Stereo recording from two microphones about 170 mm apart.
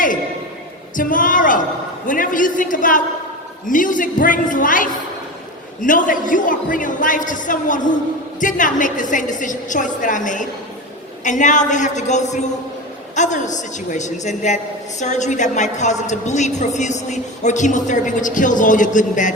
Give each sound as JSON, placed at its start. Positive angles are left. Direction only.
{"t": 0.9, "sound": "a woman's voice", "side_deg": 50}